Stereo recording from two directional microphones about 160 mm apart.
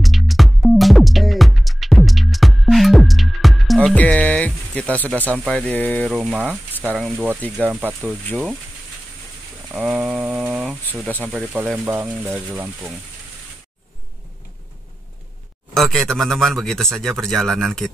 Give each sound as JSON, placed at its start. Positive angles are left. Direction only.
{"t": 0.0, "sound": "music", "side_deg": 0}
{"t": 5.2, "sound": "speech", "side_deg": -10}
{"t": 5.5, "sound": "speech", "side_deg": 10}
{"t": 6.1, "sound": "speech", "side_deg": -5}
{"t": 9.7, "sound": "speech", "side_deg": -5}
{"t": 15.7, "sound": "speech", "side_deg": 0}